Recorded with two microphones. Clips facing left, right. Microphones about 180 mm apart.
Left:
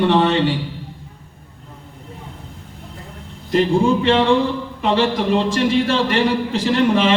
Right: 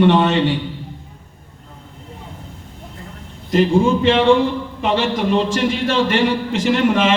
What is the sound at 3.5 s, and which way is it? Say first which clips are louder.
A man's voice: right 1 dB; 35° left (ahead or behind).